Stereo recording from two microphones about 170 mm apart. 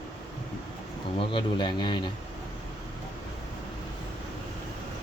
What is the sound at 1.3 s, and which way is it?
Speech, 25° left (ahead or behind).